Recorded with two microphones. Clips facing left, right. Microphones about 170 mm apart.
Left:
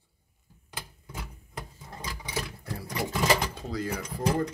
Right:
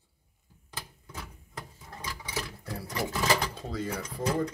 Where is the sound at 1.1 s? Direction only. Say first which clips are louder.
Left 2 dB; 15° left (ahead or behind).